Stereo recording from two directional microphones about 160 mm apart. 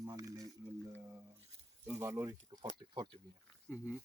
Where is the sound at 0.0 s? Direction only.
20° right (ahead or behind).